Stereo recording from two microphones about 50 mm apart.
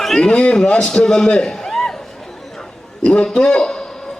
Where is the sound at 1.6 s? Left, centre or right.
Centre.